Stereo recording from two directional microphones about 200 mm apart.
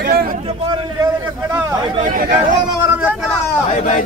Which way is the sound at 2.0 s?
45° right (ahead or behind).